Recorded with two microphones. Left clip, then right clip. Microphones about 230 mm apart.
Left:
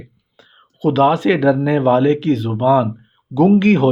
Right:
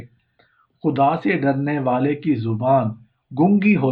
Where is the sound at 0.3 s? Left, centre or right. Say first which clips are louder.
Left 11 dB; left.